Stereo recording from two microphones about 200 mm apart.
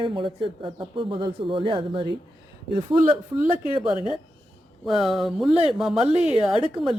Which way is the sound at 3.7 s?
25° right (ahead or behind).